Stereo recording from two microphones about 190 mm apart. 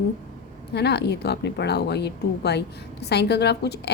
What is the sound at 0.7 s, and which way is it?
A woman's voice, 60° left (ahead or behind).